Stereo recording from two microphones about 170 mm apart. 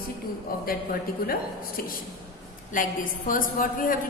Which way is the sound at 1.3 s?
60° left (ahead or behind).